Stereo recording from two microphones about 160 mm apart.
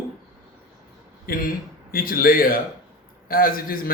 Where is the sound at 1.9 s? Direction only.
65° left (ahead or behind).